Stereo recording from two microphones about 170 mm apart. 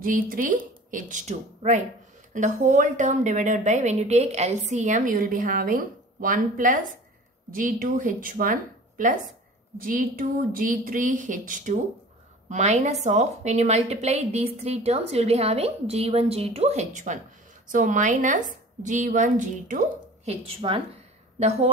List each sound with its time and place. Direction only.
0.0 s a woman's voice: 55° right (ahead or behind)
20.4 s a woman's voice: 35° right (ahead or behind)